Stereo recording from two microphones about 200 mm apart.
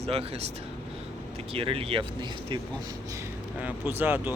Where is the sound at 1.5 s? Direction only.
30° right (ahead or behind).